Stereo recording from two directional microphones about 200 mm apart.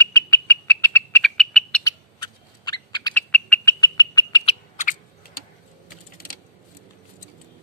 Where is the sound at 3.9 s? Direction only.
20° left (ahead or behind).